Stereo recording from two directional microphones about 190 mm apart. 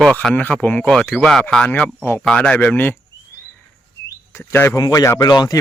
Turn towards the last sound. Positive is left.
turn(degrees=20)  # may be behind; listen again after turning